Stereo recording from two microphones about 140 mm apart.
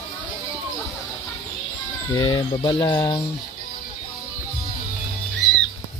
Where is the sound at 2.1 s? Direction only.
30° left (ahead or behind).